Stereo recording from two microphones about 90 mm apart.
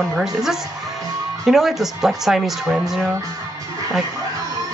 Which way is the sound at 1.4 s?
Centre (ahead or behind).